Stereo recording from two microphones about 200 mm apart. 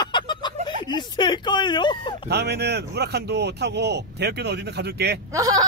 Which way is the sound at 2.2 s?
55° right (ahead or behind).